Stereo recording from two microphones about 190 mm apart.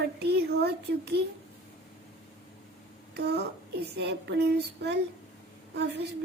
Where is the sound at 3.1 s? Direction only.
60° right (ahead or behind).